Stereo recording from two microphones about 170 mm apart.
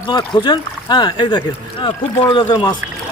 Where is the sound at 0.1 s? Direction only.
25° left (ahead or behind).